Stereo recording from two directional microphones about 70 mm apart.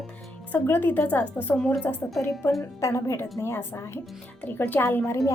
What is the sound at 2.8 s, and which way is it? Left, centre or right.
A woman's voice, left.